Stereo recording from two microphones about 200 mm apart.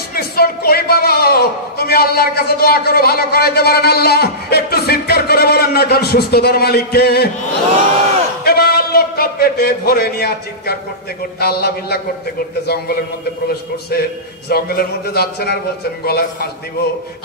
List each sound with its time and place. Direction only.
0.1 s speech: 50° left (ahead or behind)
8.5 s a man's voice: 50° left (ahead or behind)